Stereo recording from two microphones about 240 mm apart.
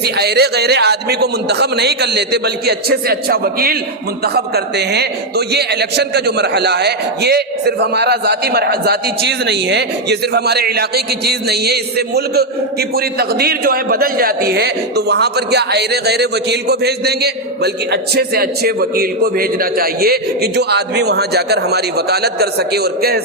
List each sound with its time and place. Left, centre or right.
0.0 s a man's voice: right